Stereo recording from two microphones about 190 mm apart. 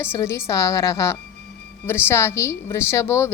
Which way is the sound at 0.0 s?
10° left (ahead or behind).